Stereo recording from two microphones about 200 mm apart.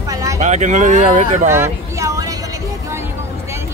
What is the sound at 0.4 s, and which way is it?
Speech, 35° right (ahead or behind).